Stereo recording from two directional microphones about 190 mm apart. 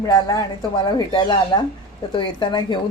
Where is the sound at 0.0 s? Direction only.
15° left (ahead or behind).